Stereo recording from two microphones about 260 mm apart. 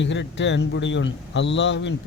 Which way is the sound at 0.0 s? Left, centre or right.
Left.